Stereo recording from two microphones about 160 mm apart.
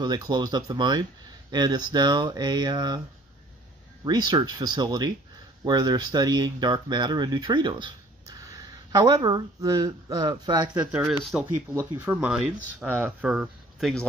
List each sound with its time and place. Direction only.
0.0 s speech: 25° right (ahead or behind)
4.0 s speech: 25° right (ahead or behind)
10.7 s speech: 5° right (ahead or behind)